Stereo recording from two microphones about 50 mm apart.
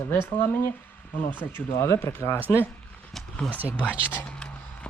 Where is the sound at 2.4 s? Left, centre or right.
Right.